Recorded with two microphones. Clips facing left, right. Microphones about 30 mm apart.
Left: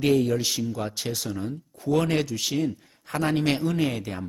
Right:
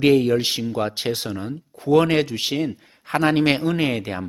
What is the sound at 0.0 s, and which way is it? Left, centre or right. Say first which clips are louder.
Speech: right 5 dB; right.